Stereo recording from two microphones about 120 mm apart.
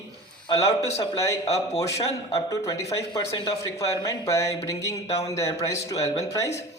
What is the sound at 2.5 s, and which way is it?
Speech, 25° left (ahead or behind).